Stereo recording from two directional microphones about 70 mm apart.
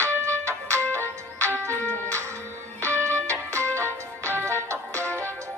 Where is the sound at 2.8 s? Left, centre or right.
Right.